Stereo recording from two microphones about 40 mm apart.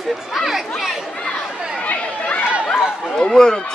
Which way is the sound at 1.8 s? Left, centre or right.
Left.